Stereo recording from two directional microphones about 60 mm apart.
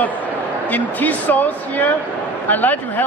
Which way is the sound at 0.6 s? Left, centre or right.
Left.